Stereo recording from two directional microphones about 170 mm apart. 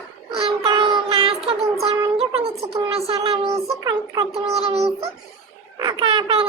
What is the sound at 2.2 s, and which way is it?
Music, 35° right (ahead or behind).